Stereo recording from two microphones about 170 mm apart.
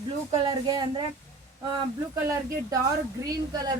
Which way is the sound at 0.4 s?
25° right (ahead or behind).